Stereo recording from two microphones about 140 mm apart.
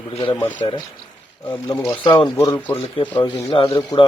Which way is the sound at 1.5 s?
25° left (ahead or behind).